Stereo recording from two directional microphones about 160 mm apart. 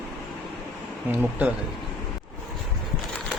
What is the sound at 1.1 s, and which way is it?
Speech, 10° right (ahead or behind).